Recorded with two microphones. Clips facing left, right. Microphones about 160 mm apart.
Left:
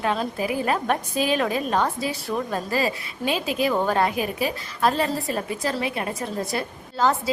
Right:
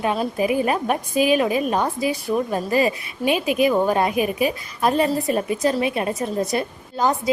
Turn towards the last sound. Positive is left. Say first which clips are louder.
# right 1 dB
turn(degrees=-20)  # may be behind; listen again after turning